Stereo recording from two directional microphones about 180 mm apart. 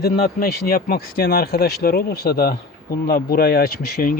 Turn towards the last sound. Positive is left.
turn(degrees=50)  # may be behind; listen again after turning